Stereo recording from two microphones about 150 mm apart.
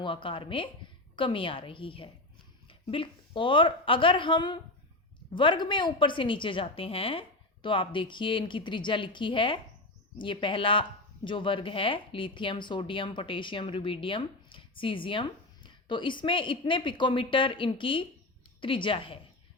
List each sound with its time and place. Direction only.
0.0 s speech: 35° left (ahead or behind)